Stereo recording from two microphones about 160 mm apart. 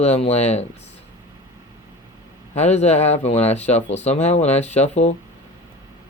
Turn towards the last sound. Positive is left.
turn(degrees=45)  # may be behind; listen again after turning